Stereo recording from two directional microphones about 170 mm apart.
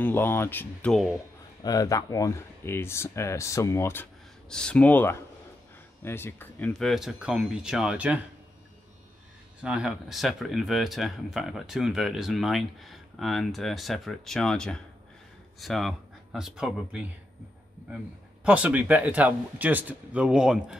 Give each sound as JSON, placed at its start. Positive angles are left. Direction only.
{"t": 0.0, "sound": "speech", "side_deg": 10}
{"t": 1.6, "sound": "speech", "side_deg": 20}
{"t": 9.6, "sound": "speech", "side_deg": -5}